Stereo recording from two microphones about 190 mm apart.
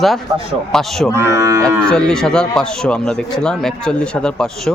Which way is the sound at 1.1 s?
15° right (ahead or behind).